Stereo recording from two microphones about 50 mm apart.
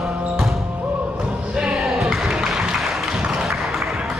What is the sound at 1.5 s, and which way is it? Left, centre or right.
Crowd, centre.